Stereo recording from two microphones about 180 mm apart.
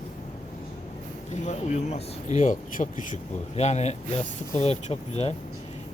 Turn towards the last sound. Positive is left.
turn(degrees=35)  # may be behind; listen again after turning